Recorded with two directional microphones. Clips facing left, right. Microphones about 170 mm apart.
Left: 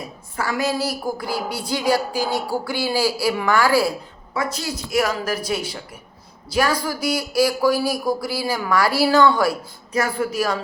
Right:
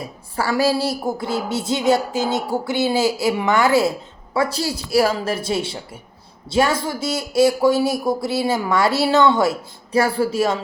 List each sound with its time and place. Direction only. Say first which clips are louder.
0.3 s a man's voice: right 4 dB; 30° right (ahead or behind)